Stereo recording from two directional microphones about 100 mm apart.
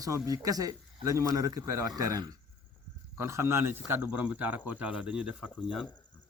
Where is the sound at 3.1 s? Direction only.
25° right (ahead or behind).